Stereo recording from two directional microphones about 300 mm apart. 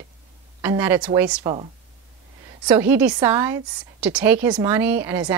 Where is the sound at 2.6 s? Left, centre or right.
Centre.